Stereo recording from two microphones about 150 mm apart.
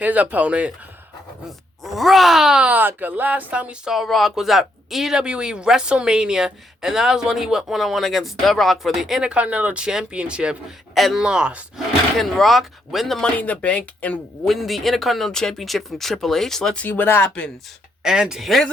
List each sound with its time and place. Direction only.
0.0 s speech: 10° right (ahead or behind); by 17.5 s 10° left (ahead or behind)
18.0 s speech: 5° right (ahead or behind)